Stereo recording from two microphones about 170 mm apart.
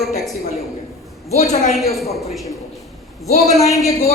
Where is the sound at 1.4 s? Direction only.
40° left (ahead or behind).